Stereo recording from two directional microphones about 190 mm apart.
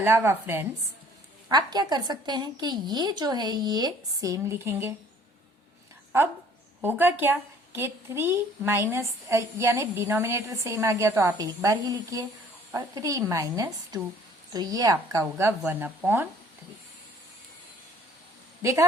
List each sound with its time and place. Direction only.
0.0 s a woman's voice: 10° right (ahead or behind)
6.1 s a woman's voice: 15° right (ahead or behind)
18.6 s a woman's voice: 15° right (ahead or behind)